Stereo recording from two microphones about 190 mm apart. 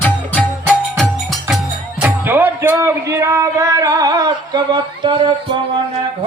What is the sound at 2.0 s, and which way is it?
Music, 10° right (ahead or behind).